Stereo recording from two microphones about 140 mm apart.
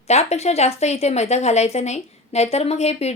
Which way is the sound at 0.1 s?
50° left (ahead or behind).